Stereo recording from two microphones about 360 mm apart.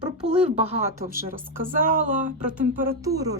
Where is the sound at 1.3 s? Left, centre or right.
Right.